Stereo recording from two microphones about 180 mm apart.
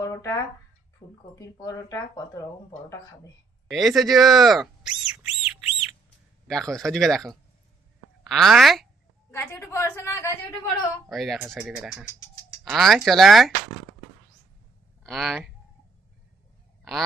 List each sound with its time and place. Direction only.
0.1 s speech: 15° left (ahead or behind)
1.0 s speech: 25° left (ahead or behind)
3.7 s a sound: centre (ahead or behind)
6.5 s speech: centre (ahead or behind)
9.3 s a woman's voice: 15° left (ahead or behind)
11.1 s speech: centre (ahead or behind)
15.0 s speech: centre (ahead or behind)